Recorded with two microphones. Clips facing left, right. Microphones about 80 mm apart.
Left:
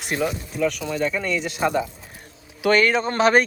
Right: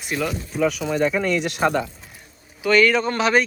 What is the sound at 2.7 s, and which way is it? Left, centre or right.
Speech, left.